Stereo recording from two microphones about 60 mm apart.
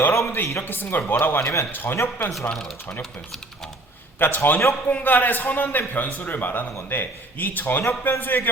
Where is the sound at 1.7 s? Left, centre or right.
Left.